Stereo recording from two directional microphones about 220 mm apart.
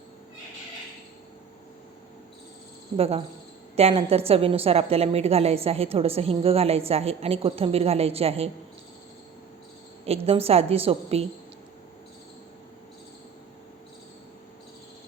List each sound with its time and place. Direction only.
3.0 s a woman's voice: 25° right (ahead or behind)
10.1 s a woman's voice: 25° right (ahead or behind)